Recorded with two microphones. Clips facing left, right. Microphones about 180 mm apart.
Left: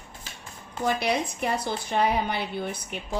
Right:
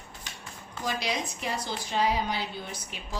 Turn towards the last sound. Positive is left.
turn(degrees=60)  # may be behind; listen again after turning